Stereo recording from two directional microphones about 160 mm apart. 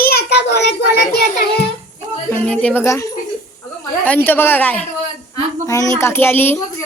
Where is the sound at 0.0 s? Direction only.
85° left.